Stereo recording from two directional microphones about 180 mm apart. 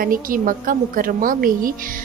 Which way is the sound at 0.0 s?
50° right (ahead or behind).